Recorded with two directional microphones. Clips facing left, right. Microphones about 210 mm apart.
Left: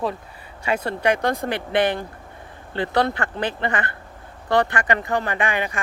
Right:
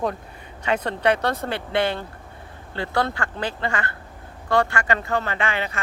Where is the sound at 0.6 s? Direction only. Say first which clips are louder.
Even; 10° left (ahead or behind).